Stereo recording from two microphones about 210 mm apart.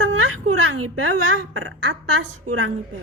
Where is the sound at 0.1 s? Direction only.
85° right.